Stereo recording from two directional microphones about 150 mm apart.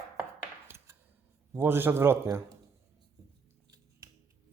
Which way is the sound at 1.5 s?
15° right (ahead or behind).